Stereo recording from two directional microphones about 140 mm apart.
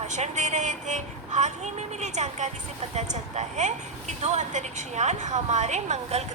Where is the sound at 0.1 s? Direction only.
60° right (ahead or behind).